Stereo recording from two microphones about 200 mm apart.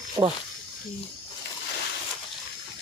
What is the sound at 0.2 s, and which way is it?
Speech, 20° right (ahead or behind).